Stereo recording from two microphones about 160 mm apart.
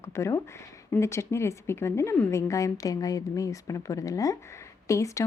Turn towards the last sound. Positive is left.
turn(degrees=20)  # may be behind; listen again after turning